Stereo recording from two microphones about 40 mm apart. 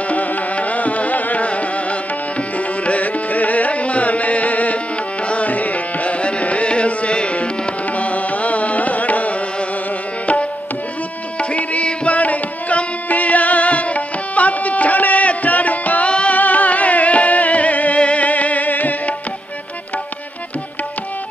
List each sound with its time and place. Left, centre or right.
0.1 s carnatic music: left
2.5 s music: left
11.3 s music: left
16.1 s music: left
16.3 s music: left